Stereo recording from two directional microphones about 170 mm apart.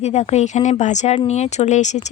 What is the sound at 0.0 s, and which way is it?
A woman's voice, 40° left (ahead or behind).